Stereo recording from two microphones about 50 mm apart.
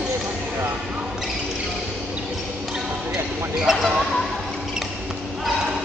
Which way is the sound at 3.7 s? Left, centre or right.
Centre.